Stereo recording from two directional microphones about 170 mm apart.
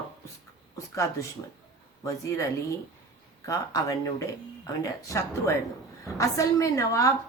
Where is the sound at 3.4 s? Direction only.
20° left (ahead or behind).